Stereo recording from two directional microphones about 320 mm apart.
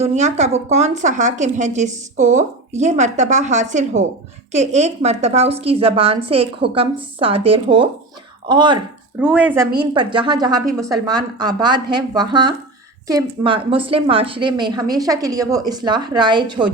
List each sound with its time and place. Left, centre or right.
0.0 s a woman's voice: right
9.1 s a woman's voice: centre